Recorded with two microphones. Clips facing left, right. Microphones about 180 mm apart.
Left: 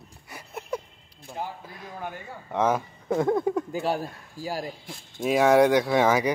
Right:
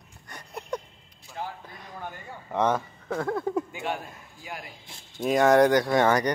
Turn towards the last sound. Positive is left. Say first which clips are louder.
# left 1 dB
turn(degrees=0)  # may be behind; listen again after turning